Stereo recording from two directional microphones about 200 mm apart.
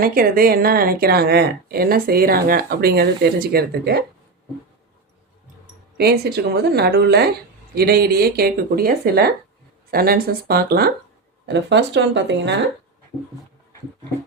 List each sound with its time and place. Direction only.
0.0 s speech: 45° right (ahead or behind)
6.0 s speech: 55° right (ahead or behind)